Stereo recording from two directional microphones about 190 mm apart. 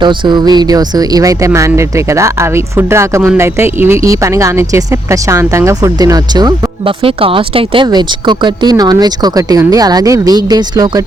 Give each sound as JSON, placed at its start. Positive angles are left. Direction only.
{"t": 0.0, "sound": "speech", "side_deg": -25}